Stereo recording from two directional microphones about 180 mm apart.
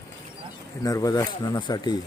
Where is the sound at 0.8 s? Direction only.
20° left (ahead or behind).